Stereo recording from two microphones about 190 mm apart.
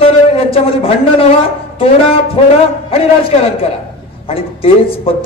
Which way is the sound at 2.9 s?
30° left (ahead or behind).